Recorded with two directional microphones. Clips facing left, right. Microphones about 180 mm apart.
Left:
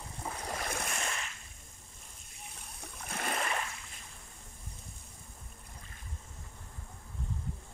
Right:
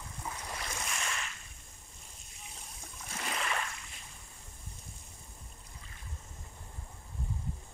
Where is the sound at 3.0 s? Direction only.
55° left (ahead or behind).